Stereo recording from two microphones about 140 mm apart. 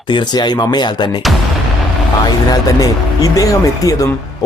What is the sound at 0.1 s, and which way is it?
Speech, 30° left (ahead or behind).